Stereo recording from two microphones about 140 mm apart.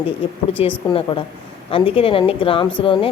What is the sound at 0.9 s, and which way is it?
Speech, 40° left (ahead or behind).